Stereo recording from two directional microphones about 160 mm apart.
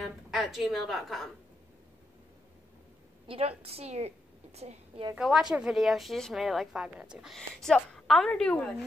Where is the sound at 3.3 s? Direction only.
40° right (ahead or behind).